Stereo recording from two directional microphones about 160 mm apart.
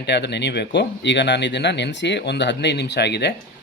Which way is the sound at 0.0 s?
90° left.